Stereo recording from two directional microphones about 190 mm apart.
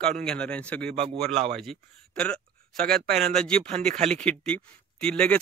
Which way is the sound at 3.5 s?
30° right (ahead or behind).